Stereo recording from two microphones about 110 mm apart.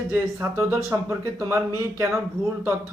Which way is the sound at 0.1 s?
20° right (ahead or behind).